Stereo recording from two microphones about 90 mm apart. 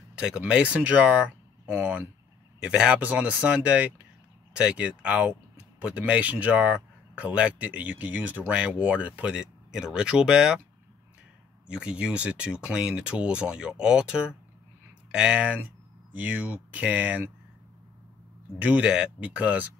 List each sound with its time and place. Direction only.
0.4 s speech: 15° right (ahead or behind)
11.6 s speech: 10° right (ahead or behind)
18.6 s speech: 15° right (ahead or behind)